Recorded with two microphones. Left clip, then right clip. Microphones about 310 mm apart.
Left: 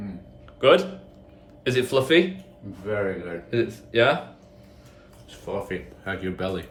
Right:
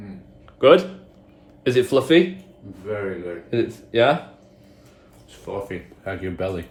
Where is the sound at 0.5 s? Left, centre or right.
Centre.